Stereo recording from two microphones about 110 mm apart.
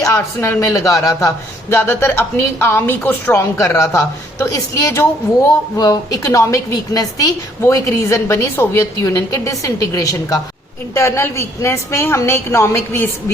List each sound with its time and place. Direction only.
0.0 s a woman's voice: 30° left (ahead or behind)